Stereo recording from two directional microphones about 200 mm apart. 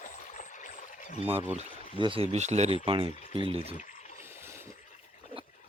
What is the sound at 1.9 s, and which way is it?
Speech, 25° right (ahead or behind).